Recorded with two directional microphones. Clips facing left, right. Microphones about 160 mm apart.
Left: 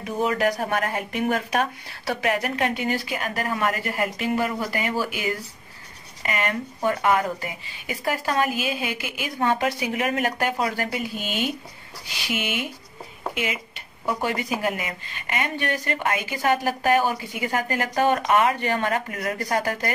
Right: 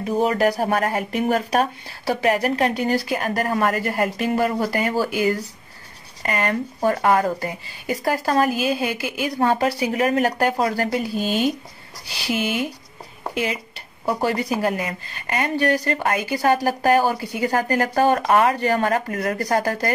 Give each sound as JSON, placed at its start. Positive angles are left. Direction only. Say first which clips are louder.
{"t": 0.0, "sound": "a woman's voice", "louder": "right 4 dB", "side_deg": -35}